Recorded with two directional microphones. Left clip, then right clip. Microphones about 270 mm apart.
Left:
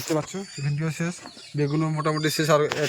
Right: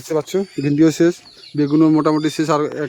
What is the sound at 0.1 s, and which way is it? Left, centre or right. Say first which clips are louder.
A man's voice: right 9 dB; right.